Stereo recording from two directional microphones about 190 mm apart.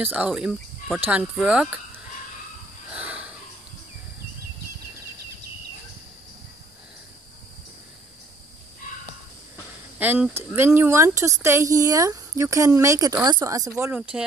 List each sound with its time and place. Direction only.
0.0 s a woman's voice: 5° right (ahead or behind)
2.9 s a sound: 5° right (ahead or behind)
9.9 s a woman's voice: 10° right (ahead or behind)